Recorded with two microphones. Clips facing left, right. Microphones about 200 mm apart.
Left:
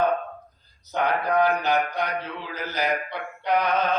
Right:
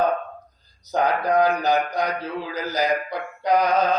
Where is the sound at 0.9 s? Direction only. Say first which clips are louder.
Right 3 dB; 40° right (ahead or behind).